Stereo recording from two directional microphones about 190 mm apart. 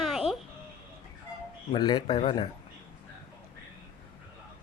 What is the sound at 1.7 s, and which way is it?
Speech, 20° left (ahead or behind).